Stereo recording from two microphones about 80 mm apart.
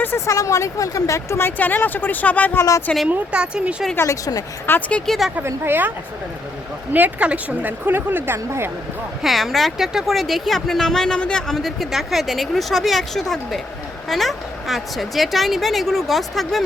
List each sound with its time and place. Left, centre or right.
0.3 s speech: left
3.1 s speech: centre
4.0 s speech: left
4.7 s speech: left
5.0 s speech: centre
5.4 s a woman's voice: right
6.9 s a woman's voice: centre
9.2 s speech: centre